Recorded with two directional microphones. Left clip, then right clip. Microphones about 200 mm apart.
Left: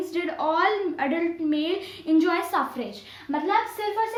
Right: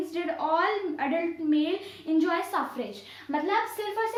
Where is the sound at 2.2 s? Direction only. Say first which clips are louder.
Left 2 dB; 35° left (ahead or behind).